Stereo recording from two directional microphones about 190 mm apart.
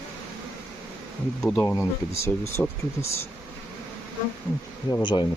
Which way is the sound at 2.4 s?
15° left (ahead or behind).